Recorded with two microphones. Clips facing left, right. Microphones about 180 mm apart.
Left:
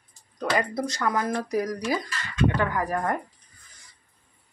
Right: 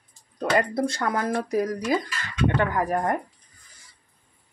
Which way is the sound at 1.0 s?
25° right (ahead or behind).